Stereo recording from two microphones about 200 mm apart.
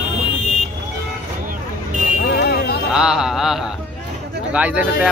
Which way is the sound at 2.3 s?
55° left (ahead or behind).